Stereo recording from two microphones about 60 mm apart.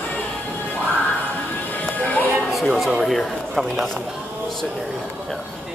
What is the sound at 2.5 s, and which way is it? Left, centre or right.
Speech, centre.